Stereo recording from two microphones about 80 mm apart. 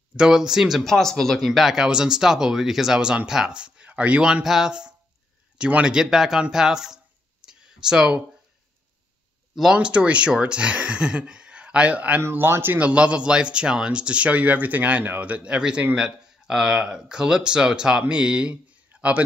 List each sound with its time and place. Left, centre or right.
0.1 s speech: centre
7.4 s clicking: centre
9.6 s speech: centre
12.2 s speech: right
12.7 s speech: centre